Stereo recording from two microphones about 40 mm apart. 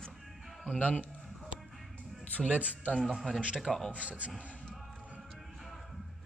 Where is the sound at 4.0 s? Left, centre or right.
Right.